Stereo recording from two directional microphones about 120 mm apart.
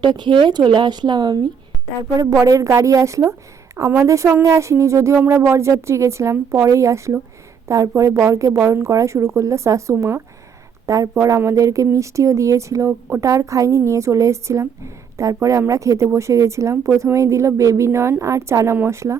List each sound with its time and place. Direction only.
0.0 s speech: 40° right (ahead or behind)
2.4 s speech: 25° right (ahead or behind)